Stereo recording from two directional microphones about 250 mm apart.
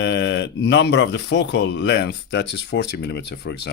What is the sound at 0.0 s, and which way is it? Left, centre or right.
Speech, left.